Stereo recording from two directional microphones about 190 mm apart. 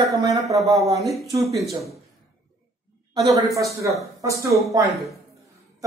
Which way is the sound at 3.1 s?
15° right (ahead or behind).